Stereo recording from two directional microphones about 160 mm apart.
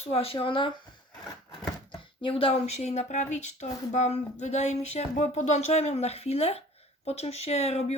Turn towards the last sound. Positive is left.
turn(degrees=40)  # may be behind; listen again after turning